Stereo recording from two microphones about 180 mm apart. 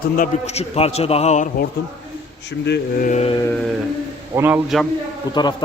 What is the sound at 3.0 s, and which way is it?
Speech, 40° left (ahead or behind).